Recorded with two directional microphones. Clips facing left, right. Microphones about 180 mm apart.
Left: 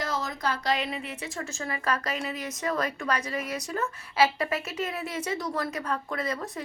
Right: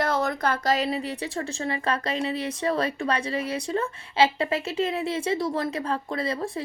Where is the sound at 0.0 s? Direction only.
55° right (ahead or behind).